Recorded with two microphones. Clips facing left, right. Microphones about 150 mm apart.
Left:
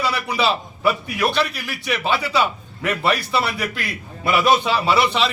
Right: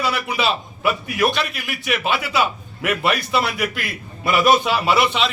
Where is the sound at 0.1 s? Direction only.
Centre (ahead or behind).